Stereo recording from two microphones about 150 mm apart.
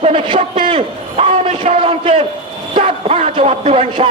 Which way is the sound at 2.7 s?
40° right (ahead or behind).